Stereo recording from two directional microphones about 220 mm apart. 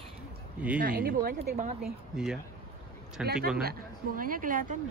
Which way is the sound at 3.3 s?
Centre (ahead or behind).